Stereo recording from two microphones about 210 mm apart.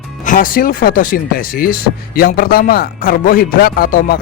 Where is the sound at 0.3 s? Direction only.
40° left (ahead or behind).